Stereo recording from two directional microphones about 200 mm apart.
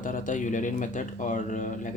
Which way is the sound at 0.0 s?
40° left (ahead or behind).